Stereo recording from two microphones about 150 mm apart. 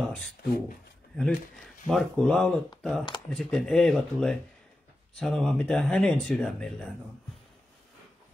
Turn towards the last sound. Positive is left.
turn(degrees=5)  # may be behind; listen again after turning